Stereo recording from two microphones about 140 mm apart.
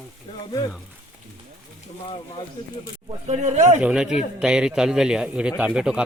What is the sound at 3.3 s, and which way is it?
Speech, 55° right (ahead or behind).